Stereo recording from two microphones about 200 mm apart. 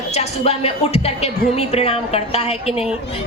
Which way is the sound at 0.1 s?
30° left (ahead or behind).